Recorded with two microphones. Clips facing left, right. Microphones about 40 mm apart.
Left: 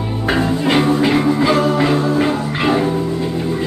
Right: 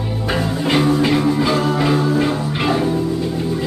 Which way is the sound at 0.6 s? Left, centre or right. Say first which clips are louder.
Even; centre.